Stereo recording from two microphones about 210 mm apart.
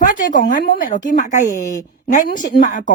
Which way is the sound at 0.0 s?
40° left (ahead or behind).